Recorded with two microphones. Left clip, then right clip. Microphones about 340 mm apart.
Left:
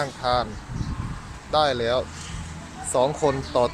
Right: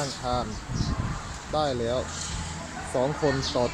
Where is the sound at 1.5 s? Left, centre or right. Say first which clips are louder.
Left 6 dB; left.